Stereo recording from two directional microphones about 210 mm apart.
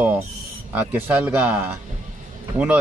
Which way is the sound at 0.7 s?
10° right (ahead or behind).